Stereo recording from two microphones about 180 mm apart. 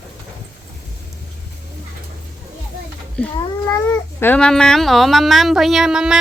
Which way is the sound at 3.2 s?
5° left (ahead or behind).